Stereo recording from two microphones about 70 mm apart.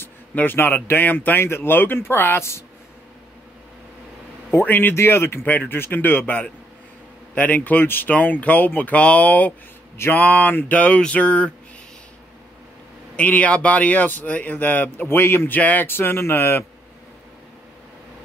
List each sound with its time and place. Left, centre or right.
0.0 s speech: left
4.5 s speech: left
13.1 s speech: left